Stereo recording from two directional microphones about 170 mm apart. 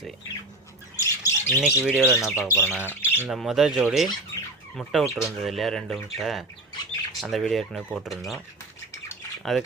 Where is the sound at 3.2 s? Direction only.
Centre (ahead or behind).